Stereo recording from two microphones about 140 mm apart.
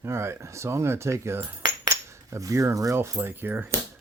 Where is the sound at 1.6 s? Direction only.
25° right (ahead or behind).